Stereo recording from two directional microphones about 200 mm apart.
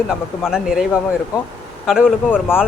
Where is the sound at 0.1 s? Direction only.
5° right (ahead or behind).